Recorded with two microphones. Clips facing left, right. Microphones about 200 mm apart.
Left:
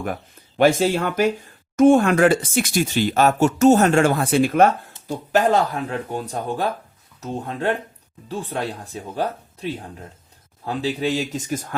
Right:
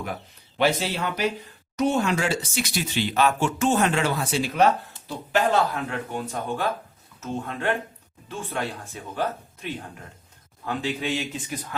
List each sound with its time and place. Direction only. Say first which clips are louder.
0.0 s speech: left 5 dB; 50° left (ahead or behind)
5.0 s speech: left 5 dB; 40° left (ahead or behind)